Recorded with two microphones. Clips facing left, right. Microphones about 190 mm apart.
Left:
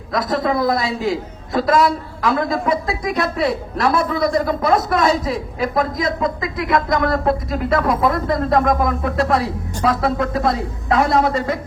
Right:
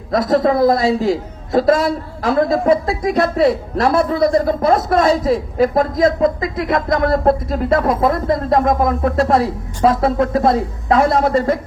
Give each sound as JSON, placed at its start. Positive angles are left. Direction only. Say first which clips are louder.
{"t": 0.1, "sound": "a man's voice", "louder": "right 5 dB", "side_deg": -30}
{"t": 11.1, "sound": "a woman's voice", "louder": "right 3 dB", "side_deg": -50}